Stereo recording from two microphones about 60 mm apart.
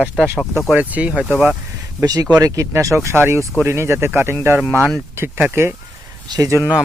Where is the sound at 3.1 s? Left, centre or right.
Right.